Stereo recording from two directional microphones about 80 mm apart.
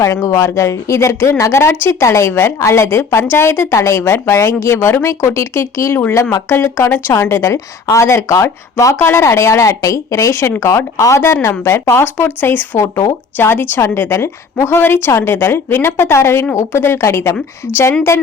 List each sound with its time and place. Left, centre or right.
0.0 s a woman's voice: left